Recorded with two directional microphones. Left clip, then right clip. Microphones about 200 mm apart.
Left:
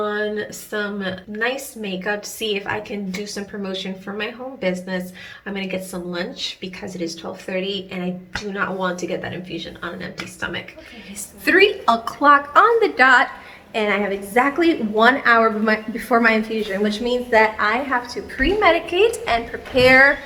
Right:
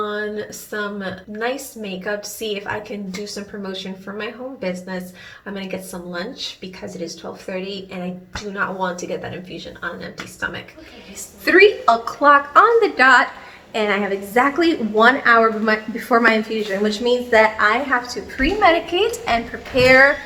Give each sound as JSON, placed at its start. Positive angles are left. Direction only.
{"t": 0.0, "sound": "a sound", "side_deg": 25}
{"t": 0.3, "sound": "a woman's voice", "side_deg": 0}
{"t": 4.2, "sound": "a woman's voice", "side_deg": 5}
{"t": 6.1, "sound": "a woman's voice", "side_deg": 5}
{"t": 11.4, "sound": "a woman's voice", "side_deg": 0}